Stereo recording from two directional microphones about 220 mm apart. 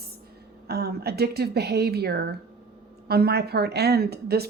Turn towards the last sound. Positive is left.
turn(degrees=-45)  # may be behind; listen again after turning